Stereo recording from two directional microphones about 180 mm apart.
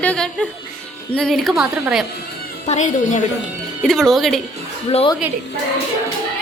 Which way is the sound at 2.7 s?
40° left (ahead or behind).